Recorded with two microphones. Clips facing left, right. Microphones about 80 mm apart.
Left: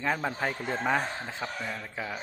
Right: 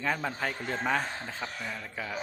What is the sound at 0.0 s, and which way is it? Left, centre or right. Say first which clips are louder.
A man's voice: left 2 dB; centre.